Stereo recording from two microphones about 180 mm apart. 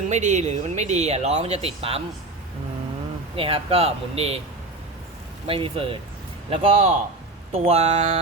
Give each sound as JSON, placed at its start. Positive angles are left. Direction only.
{"t": 0.1, "sound": "speech", "side_deg": -40}
{"t": 3.3, "sound": "speech", "side_deg": -30}
{"t": 5.5, "sound": "speech", "side_deg": -30}